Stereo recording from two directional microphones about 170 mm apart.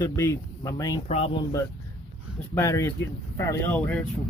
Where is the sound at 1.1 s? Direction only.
35° left (ahead or behind).